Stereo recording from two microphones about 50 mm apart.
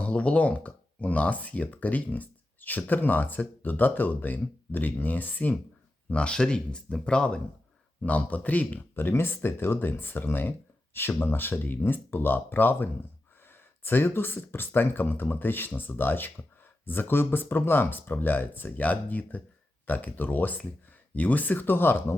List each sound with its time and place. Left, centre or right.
0.0 s speech: left
6.1 s speech: left
8.0 s speech: left
9.0 s speech: left